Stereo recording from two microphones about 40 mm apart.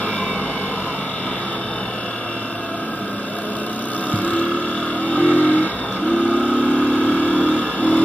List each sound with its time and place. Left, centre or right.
4.1 s vehicle: left
6.4 s vehicle: left